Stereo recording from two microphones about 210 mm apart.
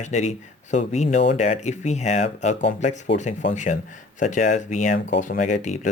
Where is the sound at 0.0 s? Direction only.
35° left (ahead or behind).